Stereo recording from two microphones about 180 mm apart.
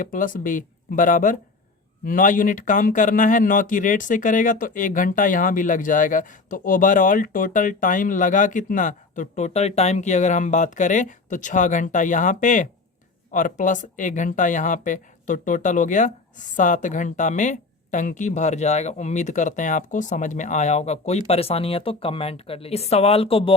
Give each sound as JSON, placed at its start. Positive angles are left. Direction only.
{"t": 0.0, "sound": "speech", "side_deg": 50}